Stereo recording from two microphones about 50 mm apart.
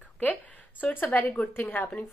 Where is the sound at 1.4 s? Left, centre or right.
Left.